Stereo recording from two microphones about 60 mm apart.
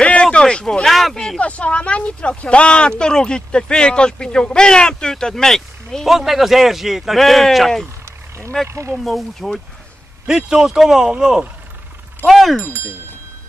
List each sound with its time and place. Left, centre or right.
0.0 s a sound: centre
0.8 s speech: centre
1.4 s speech: left; by 6.0 s centre
6.0 s speech: centre
8.6 s speech: right
8.9 s speech: centre
10.2 s speech: centre
12.6 s speech: right